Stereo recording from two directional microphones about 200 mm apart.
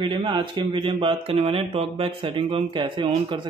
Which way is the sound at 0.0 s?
25° right (ahead or behind).